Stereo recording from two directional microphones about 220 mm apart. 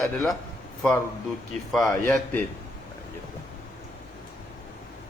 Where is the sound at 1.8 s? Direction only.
15° left (ahead or behind).